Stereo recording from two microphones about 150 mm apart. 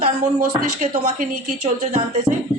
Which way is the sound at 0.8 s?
55° right (ahead or behind).